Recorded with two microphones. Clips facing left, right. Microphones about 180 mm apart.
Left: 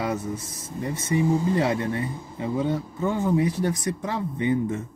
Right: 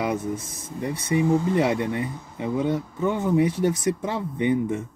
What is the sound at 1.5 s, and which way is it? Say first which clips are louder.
Speech: right 1 dB; 20° right (ahead or behind).